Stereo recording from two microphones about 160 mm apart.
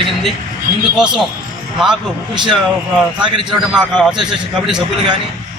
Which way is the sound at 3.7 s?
5° right (ahead or behind).